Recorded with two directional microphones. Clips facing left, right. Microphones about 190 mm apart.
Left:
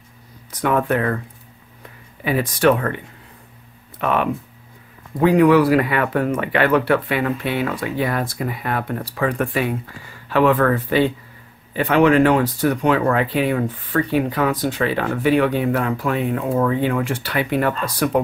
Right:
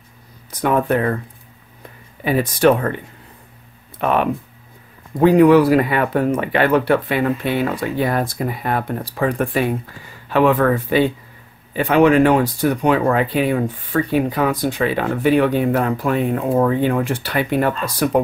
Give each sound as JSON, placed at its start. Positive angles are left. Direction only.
{"t": 0.6, "sound": "speech", "side_deg": -35}
{"t": 2.2, "sound": "speech", "side_deg": -35}
{"t": 4.0, "sound": "speech", "side_deg": -40}
{"t": 10.3, "sound": "speech", "side_deg": -15}
{"t": 15.5, "sound": "speech", "side_deg": -40}